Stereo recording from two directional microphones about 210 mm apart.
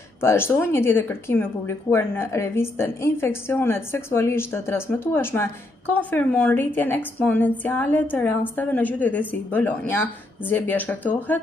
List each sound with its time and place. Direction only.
0.2 s speech: 10° left (ahead or behind)